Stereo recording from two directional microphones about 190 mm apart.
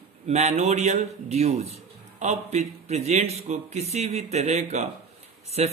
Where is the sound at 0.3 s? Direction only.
35° right (ahead or behind).